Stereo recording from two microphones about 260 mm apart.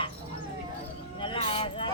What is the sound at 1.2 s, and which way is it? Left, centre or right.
Music, centre.